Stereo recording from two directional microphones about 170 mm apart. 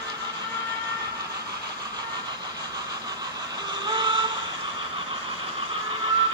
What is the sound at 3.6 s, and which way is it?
Vehicle, 25° right (ahead or behind).